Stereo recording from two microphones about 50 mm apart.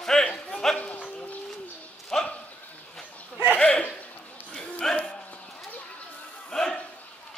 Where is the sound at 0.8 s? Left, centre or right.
Left.